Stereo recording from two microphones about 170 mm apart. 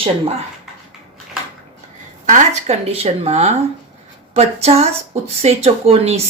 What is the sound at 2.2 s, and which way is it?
Speech, 45° right (ahead or behind).